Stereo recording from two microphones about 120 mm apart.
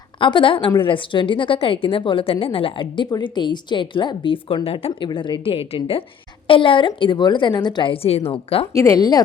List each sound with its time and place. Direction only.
0.2 s a woman's voice: 45° left (ahead or behind)
8.7 s speech: 25° left (ahead or behind)